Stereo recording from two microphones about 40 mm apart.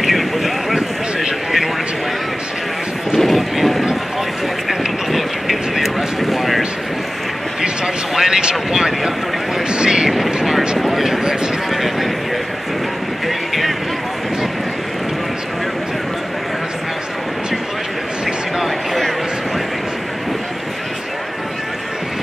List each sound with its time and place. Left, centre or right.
0.0 s boat: centre
3.2 s vehicle: centre
8.1 s vehicle: centre
9.7 s boat: right
10.0 s vehicle: centre
10.8 s a sound: centre
18.6 s a sound: centre